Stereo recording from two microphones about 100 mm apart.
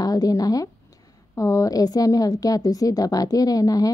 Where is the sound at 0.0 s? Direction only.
40° left (ahead or behind).